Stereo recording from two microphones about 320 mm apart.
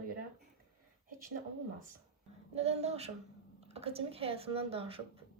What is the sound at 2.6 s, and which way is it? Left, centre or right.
A woman's voice, centre.